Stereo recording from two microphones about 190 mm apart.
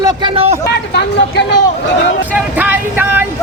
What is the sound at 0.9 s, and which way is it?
Speech, 60° left (ahead or behind).